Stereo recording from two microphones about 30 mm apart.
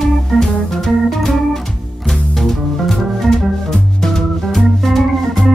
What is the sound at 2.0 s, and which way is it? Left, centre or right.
Music, centre.